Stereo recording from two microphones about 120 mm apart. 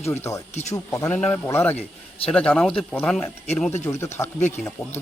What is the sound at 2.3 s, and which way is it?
Speech, 5° left (ahead or behind).